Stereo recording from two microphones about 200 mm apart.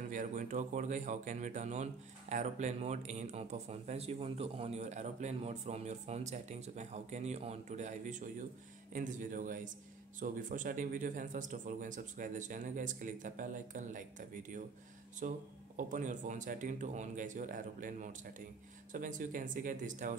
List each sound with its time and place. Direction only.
0.1 s a man's voice: 40° right (ahead or behind)